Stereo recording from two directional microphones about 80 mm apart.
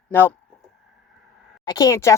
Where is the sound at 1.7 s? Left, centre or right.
Left.